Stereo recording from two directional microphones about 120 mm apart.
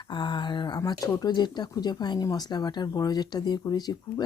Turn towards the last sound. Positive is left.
turn(degrees=35)  # may be behind; listen again after turning